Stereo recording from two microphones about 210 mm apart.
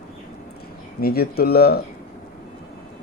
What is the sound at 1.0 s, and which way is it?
Speech, 45° left (ahead or behind).